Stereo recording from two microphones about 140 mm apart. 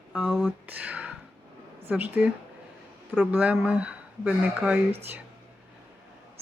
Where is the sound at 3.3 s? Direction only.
10° right (ahead or behind).